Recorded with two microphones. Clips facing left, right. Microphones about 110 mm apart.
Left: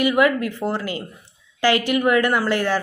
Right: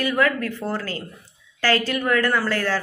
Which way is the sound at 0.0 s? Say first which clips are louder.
Left 4 dB; 15° left (ahead or behind).